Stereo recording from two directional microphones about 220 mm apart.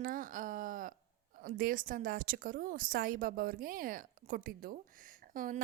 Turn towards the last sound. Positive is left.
turn(degrees=-40)  # may be behind; listen again after turning